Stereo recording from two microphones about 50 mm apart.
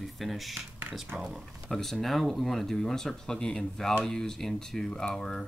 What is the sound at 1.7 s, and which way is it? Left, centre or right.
Speech, centre.